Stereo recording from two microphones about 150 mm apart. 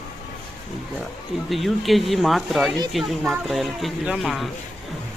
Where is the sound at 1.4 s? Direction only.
Centre (ahead or behind).